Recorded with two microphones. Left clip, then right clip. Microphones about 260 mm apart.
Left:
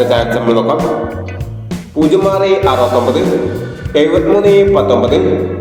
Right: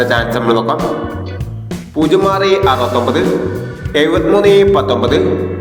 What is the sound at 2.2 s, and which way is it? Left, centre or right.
Music, right.